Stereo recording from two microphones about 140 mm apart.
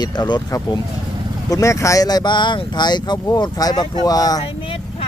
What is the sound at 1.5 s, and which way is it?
Speech, 25° left (ahead or behind).